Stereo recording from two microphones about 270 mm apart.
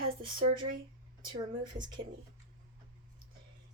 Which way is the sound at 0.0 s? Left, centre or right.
Right.